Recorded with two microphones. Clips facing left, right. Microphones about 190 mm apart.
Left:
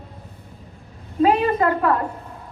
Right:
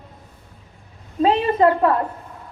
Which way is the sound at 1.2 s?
25° right (ahead or behind).